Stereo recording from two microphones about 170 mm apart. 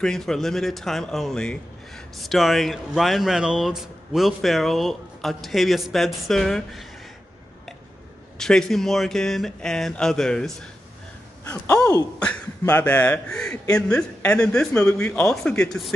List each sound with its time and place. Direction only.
0.0 s speech: 5° left (ahead or behind)
8.4 s speech: 5° left (ahead or behind)
11.4 s speech: 15° left (ahead or behind)
12.2 s speech: 5° left (ahead or behind)